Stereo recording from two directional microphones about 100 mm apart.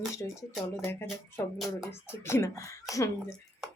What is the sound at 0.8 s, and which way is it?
Speech, 25° left (ahead or behind).